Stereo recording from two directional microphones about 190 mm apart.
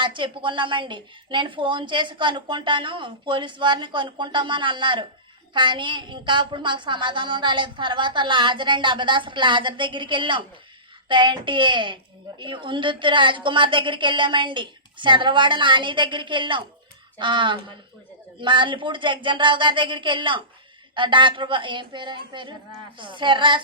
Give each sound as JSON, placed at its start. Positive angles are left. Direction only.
{"t": 0.0, "sound": "a woman's voice", "side_deg": -25}